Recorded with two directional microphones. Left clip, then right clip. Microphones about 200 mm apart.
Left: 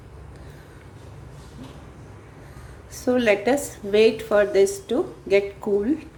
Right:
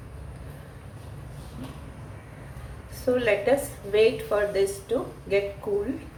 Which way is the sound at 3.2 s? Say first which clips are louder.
Left 3 dB; 55° left (ahead or behind).